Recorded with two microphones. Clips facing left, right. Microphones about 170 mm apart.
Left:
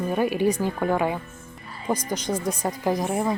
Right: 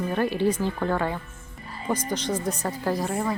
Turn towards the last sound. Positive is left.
turn(degrees=15)  # may be behind; listen again after turning